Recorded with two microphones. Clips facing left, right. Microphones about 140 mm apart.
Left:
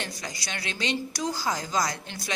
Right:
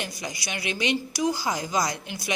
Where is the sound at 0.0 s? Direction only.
15° right (ahead or behind).